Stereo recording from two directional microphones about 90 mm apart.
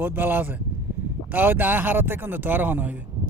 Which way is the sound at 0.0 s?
20° right (ahead or behind).